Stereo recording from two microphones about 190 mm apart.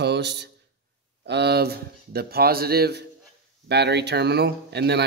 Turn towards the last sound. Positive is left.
turn(degrees=-60)  # may be behind; listen again after turning